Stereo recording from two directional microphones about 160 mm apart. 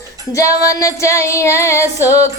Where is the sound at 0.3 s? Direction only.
20° left (ahead or behind).